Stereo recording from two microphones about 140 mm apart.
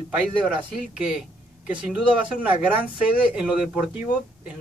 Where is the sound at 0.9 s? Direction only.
5° right (ahead or behind).